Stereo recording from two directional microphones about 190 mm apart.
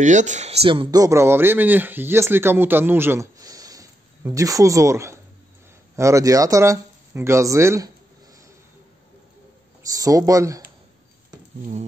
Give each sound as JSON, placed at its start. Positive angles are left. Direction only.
{"t": 0.0, "sound": "speech", "side_deg": -40}
{"t": 9.8, "sound": "speech", "side_deg": -20}